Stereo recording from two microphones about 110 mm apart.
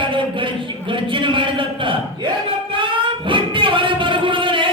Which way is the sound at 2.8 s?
50° right (ahead or behind).